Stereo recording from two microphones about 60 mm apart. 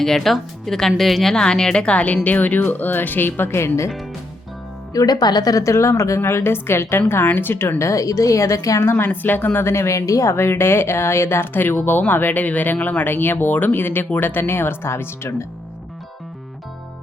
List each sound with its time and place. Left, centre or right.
0.0 s a woman's voice: centre; by 3.7 s left
4.9 s speech: left
7.8 s speech: left
8.8 s speech: left
10.3 s speech: left